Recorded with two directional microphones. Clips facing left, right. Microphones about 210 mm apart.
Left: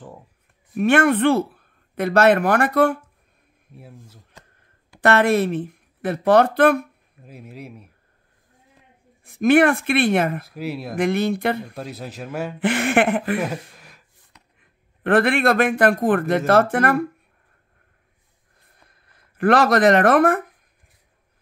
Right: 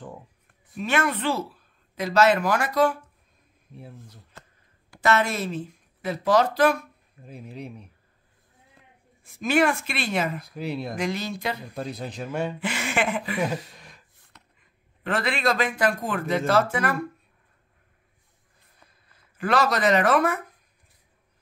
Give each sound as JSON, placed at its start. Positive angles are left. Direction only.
{"t": 0.7, "sound": "speech", "side_deg": 55}
{"t": 3.7, "sound": "a man's voice", "side_deg": 5}
{"t": 5.0, "sound": "speech", "side_deg": 60}
{"t": 7.2, "sound": "a man's voice", "side_deg": 5}
{"t": 9.2, "sound": "speech", "side_deg": 60}
{"t": 10.5, "sound": "a man's voice", "side_deg": 5}
{"t": 11.0, "sound": "speech", "side_deg": 60}
{"t": 11.7, "sound": "a man's voice", "side_deg": 5}
{"t": 12.5, "sound": "speech", "side_deg": 55}
{"t": 13.7, "sound": "a sound", "side_deg": 5}
{"t": 14.6, "sound": "a man's voice", "side_deg": 55}
{"t": 18.9, "sound": "speech", "side_deg": 60}